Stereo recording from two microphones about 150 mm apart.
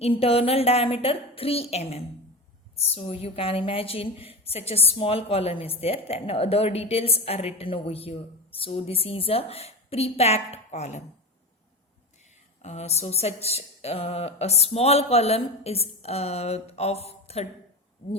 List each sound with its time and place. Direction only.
0.0 s a woman's voice: 40° left (ahead or behind)
12.6 s speech: 45° left (ahead or behind)